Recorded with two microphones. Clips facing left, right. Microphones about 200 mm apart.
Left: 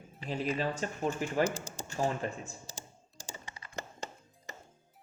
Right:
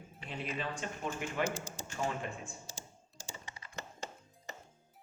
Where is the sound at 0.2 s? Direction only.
40° left (ahead or behind).